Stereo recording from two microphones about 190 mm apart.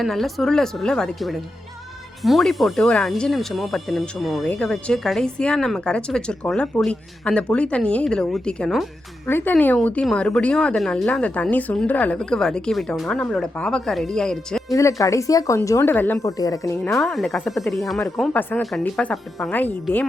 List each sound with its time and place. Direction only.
0.0 s speech: centre (ahead or behind)
14.8 s a woman's voice: 15° left (ahead or behind)
16.8 s speech: 5° left (ahead or behind)